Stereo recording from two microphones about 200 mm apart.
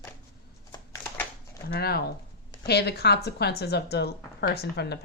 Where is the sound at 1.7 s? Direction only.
50° left (ahead or behind).